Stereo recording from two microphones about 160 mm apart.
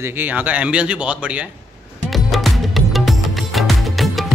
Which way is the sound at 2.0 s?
Centre (ahead or behind).